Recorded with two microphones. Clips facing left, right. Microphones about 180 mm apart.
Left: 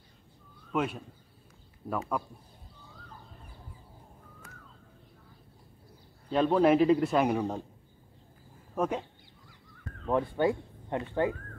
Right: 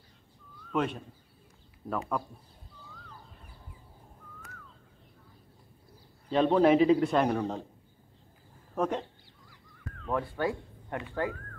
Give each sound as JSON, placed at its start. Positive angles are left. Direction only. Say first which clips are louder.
{"t": 0.7, "sound": "a man's voice", "louder": "right 1 dB", "side_deg": 5}
{"t": 6.3, "sound": "a man's voice", "louder": "right 1 dB", "side_deg": 0}
{"t": 8.7, "sound": "speech", "louder": "even", "side_deg": 5}
{"t": 10.0, "sound": "speech", "louder": "left 4 dB", "side_deg": 20}